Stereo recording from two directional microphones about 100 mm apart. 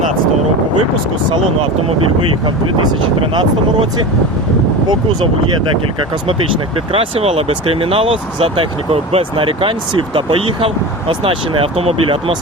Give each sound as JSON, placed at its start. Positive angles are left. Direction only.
{"t": 6.9, "sound": "speech", "side_deg": -80}